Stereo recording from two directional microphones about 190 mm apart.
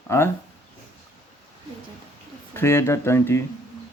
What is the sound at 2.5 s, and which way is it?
Speech, 15° left (ahead or behind).